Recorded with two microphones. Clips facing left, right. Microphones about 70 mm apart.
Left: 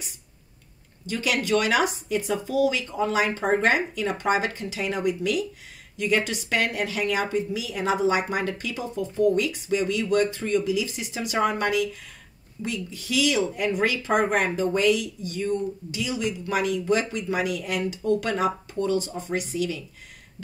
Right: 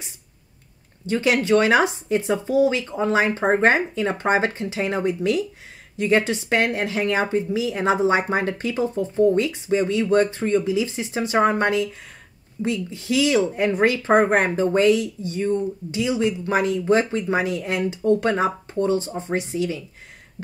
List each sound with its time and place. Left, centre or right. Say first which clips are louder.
1.0 s speech: right 6 dB; right